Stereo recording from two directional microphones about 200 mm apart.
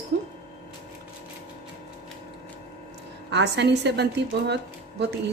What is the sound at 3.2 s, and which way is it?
A woman's voice, 60° right (ahead or behind).